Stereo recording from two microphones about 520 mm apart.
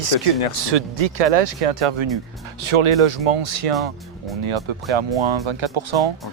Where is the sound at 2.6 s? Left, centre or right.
Right.